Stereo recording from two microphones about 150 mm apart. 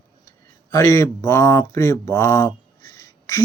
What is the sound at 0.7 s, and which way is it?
Speech, 20° left (ahead or behind).